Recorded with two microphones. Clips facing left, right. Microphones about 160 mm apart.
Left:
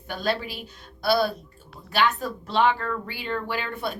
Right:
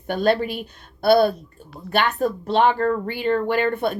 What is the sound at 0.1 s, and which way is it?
Speech, 50° right (ahead or behind).